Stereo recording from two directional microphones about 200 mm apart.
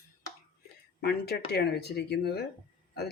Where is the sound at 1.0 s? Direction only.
55° left (ahead or behind).